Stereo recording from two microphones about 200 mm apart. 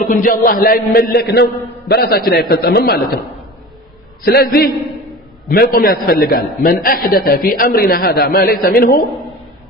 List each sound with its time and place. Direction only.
0.0 s a man's voice: 45° left (ahead or behind)
4.2 s a man's voice: 50° left (ahead or behind)